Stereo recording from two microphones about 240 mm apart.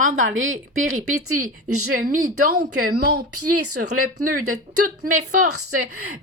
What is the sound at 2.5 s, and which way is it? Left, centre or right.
A woman's voice, right.